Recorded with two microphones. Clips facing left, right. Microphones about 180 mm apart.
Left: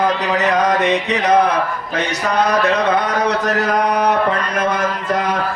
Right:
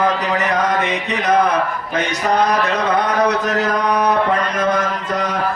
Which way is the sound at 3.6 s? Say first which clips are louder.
Left 2 dB; 60° left (ahead or behind).